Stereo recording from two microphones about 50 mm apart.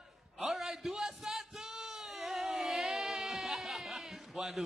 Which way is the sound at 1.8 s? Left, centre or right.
Centre.